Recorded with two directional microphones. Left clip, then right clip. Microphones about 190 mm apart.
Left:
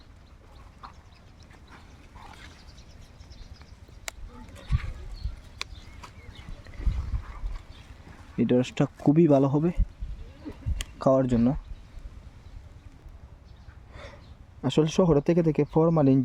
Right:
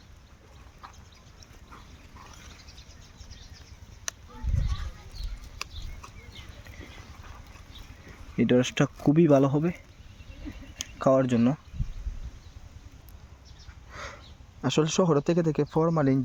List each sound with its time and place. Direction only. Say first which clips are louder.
8.4 s speech: right 1 dB; centre (ahead or behind)
11.0 s speech: even; 10° left (ahead or behind)
13.9 s a sound: right 6 dB; centre (ahead or behind)
14.6 s speech: left 1 dB; 15° left (ahead or behind)